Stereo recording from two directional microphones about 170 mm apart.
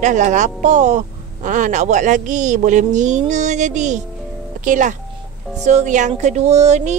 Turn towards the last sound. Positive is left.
turn(degrees=-40)  # may be behind; listen again after turning